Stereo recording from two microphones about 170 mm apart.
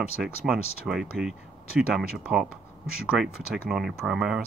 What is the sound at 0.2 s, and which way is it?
Speech, 5° right (ahead or behind).